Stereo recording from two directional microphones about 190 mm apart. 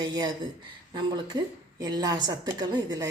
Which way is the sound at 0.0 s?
20° right (ahead or behind).